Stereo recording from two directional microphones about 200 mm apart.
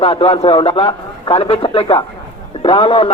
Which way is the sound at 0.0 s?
25° left (ahead or behind).